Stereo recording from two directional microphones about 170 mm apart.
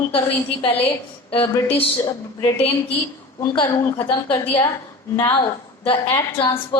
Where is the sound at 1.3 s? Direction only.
35° left (ahead or behind).